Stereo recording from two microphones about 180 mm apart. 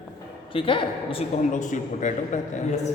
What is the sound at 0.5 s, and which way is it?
Speech, 30° left (ahead or behind).